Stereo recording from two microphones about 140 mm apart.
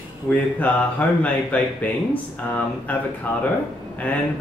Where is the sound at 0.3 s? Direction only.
10° left (ahead or behind).